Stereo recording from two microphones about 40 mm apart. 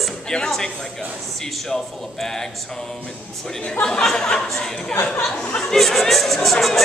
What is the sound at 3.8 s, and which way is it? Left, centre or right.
Speech, centre.